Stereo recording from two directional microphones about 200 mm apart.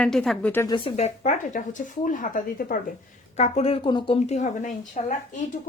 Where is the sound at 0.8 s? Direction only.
30° left (ahead or behind).